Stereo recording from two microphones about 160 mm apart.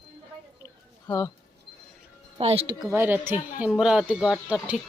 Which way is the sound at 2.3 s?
35° right (ahead or behind).